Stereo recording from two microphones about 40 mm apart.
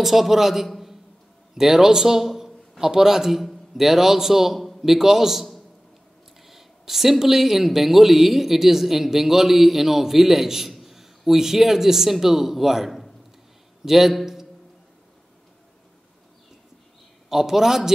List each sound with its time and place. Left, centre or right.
0.0 s speech: centre
0.7 s a sound: centre
1.5 s a man's voice: centre
17.3 s speech: centre